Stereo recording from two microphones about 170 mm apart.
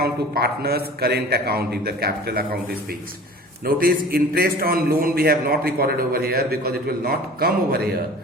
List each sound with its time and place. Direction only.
0.0 s a man's voice: 65° right (ahead or behind)
3.8 s a man's voice: 60° right (ahead or behind)